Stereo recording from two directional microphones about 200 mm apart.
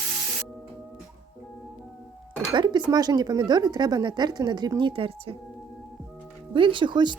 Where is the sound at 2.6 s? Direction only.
20° right (ahead or behind).